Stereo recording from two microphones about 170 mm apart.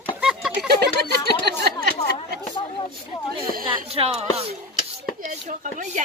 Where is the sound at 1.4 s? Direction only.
70° right (ahead or behind).